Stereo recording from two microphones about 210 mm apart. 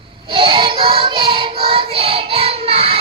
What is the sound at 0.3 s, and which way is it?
Child singing, 25° right (ahead or behind).